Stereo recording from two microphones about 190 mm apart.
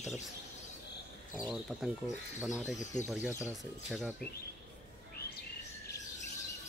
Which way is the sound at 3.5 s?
Centre (ahead or behind).